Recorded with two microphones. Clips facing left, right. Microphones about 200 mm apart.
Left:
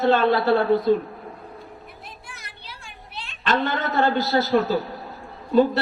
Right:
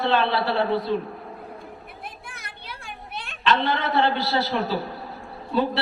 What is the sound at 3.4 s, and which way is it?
A man's voice, 45° left (ahead or behind).